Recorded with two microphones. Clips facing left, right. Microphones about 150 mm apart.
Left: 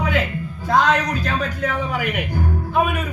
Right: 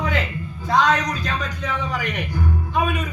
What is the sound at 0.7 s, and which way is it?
Speech, 55° left (ahead or behind).